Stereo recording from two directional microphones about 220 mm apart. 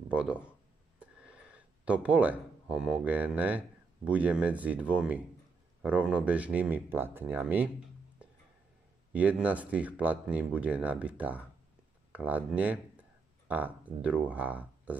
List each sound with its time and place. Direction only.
0.1 s speech: 5° right (ahead or behind)
9.1 s speech: 5° right (ahead or behind)